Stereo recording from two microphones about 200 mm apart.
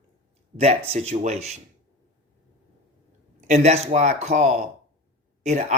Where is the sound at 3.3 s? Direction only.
35° right (ahead or behind).